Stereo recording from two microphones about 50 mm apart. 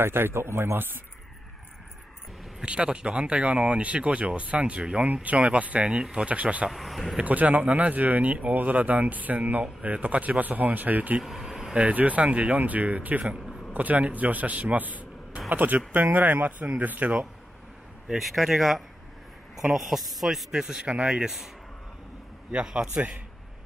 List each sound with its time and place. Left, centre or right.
0.0 s speech: right
2.6 s speech: right
6.7 s speech: centre
7.2 s speech: right
11.2 s vehicle: centre
11.7 s speech: right
13.4 s a sound: centre
13.7 s speech: right
18.1 s speech: centre
19.9 s speech: centre
20.5 s a man's voice: centre
22.5 s a man's voice: centre